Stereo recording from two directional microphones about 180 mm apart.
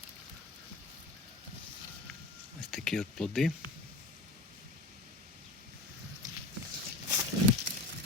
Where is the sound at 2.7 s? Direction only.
Centre (ahead or behind).